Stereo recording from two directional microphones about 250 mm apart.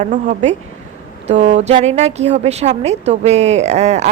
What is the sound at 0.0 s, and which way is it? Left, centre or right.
A woman's voice, right.